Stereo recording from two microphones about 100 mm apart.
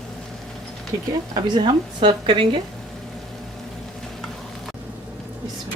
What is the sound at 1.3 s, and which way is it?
A woman's voice, 45° right (ahead or behind).